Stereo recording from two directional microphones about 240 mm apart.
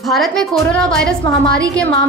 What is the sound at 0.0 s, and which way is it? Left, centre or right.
A woman's voice, centre.